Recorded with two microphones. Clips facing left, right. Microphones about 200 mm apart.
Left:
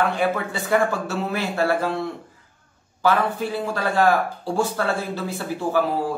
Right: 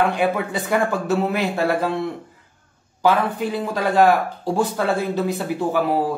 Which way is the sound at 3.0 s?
15° right (ahead or behind).